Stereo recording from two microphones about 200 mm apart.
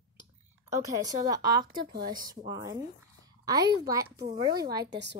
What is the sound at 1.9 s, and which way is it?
Speech, 50° right (ahead or behind).